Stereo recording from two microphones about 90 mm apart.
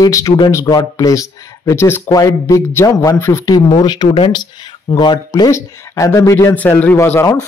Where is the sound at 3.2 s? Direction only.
25° left (ahead or behind).